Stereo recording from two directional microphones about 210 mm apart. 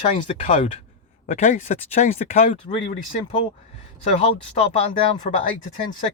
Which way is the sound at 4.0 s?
30° left (ahead or behind).